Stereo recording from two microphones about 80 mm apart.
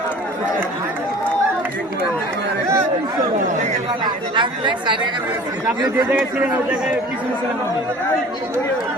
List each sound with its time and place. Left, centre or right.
4.0 s speech: right
6.1 s a man's voice: right